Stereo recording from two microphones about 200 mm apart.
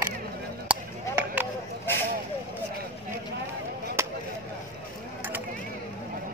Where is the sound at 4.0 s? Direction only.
15° right (ahead or behind).